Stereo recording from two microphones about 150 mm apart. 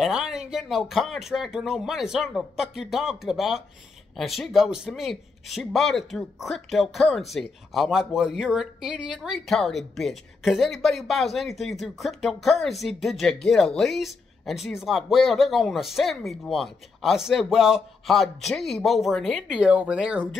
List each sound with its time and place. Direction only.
0.0 s a man's voice: 5° right (ahead or behind)